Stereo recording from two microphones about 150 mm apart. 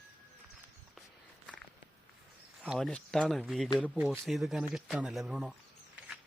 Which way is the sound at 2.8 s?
5° left (ahead or behind).